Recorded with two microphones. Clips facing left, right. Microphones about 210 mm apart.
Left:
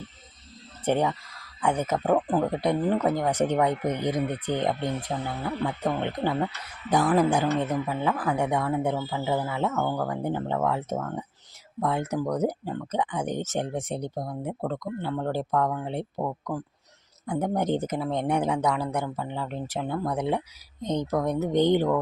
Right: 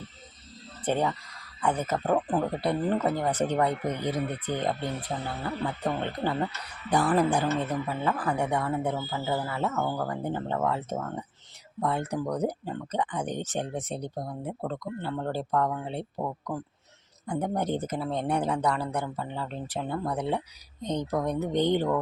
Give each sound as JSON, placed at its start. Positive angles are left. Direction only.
{"t": 0.9, "sound": "speech", "side_deg": 15}
{"t": 9.7, "sound": "speech", "side_deg": -5}
{"t": 10.1, "sound": "speech", "side_deg": 10}
{"t": 20.8, "sound": "speech", "side_deg": -15}
{"t": 21.1, "sound": "speech", "side_deg": 10}